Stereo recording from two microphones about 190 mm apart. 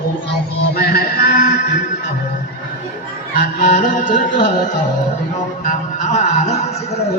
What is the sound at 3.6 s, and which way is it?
Music, 45° left (ahead or behind).